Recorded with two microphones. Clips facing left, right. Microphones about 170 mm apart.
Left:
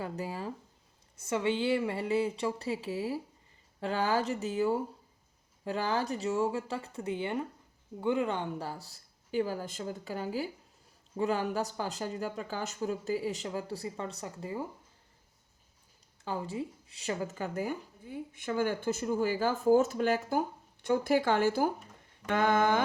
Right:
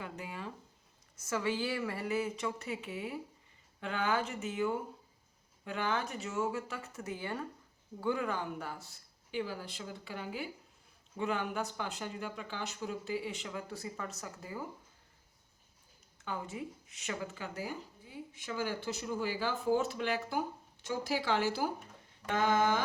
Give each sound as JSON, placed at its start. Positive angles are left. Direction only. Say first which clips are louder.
{"t": 0.0, "sound": "speech", "louder": "left 6 dB", "side_deg": 35}
{"t": 1.2, "sound": "speech", "louder": "left 4 dB", "side_deg": 25}
{"t": 16.2, "sound": "speech", "louder": "left 5 dB", "side_deg": 30}
{"t": 20.8, "sound": "speech", "louder": "left 7 dB", "side_deg": 55}
{"t": 22.3, "sound": "a sound", "louder": "left 3 dB", "side_deg": 55}